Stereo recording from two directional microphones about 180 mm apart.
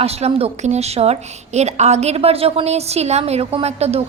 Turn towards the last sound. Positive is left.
turn(degrees=-35)  # may be behind; listen again after turning